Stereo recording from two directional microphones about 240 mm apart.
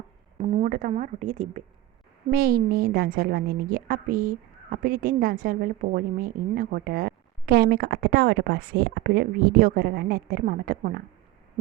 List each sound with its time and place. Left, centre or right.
0.3 s a woman's voice: right